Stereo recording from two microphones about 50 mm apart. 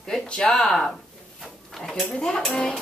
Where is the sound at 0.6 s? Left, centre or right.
Centre.